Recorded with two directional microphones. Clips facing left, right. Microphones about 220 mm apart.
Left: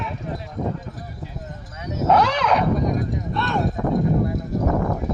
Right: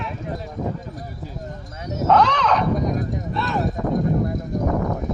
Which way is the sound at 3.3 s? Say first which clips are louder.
Even; centre (ahead or behind).